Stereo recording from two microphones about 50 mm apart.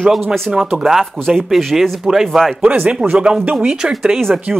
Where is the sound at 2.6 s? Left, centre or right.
Right.